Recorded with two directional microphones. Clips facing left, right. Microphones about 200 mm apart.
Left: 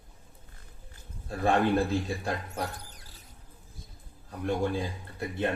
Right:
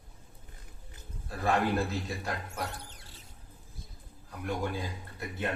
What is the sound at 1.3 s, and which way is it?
Speech, 30° left (ahead or behind).